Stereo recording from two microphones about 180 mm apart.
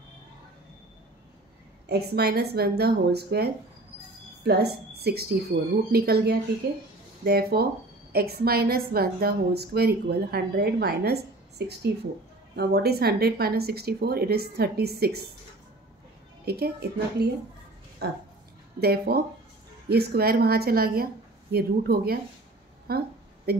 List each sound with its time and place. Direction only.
1.9 s a woman's voice: 65° right (ahead or behind)
16.4 s a woman's voice: 60° right (ahead or behind)
18.8 s a woman's voice: 60° right (ahead or behind)
22.8 s a sound: 60° right (ahead or behind)